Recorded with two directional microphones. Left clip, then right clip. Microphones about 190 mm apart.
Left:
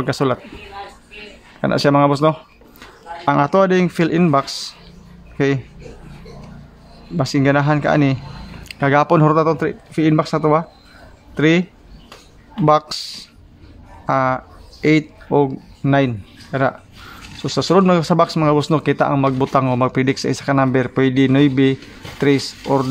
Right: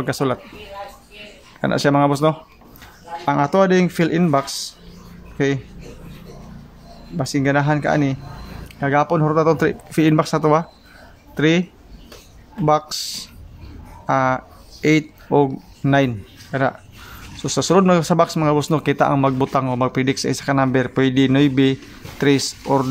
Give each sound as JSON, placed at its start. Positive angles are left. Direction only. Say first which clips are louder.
{"t": 0.0, "sound": "a man's voice", "louder": "left 2 dB", "side_deg": 10}
{"t": 1.6, "sound": "a man's voice", "louder": "left 2 dB", "side_deg": 10}
{"t": 7.2, "sound": "a man's voice", "louder": "left 3 dB", "side_deg": 15}
{"t": 9.6, "sound": "a man's voice", "louder": "right 1 dB", "side_deg": 0}
{"t": 12.6, "sound": "speech", "louder": "left 3 dB", "side_deg": 15}